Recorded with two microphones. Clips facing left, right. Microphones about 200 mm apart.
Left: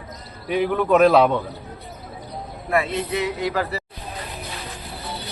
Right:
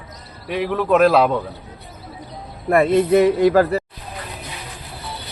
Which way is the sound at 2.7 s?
50° right (ahead or behind).